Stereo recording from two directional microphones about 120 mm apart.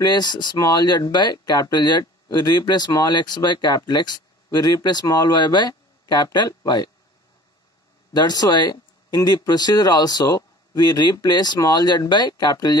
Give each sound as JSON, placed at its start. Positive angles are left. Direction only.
{"t": 0.0, "sound": "speech", "side_deg": 35}
{"t": 8.1, "sound": "speech", "side_deg": 35}